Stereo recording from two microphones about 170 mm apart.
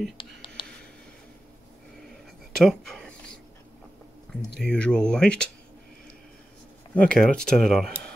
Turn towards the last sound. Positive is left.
turn(degrees=0)  # may be behind; listen again after turning